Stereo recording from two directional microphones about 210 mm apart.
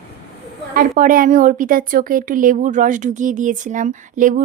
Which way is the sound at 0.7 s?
45° right (ahead or behind).